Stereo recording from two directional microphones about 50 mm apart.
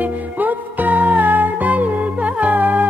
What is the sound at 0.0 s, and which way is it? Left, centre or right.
Music, right.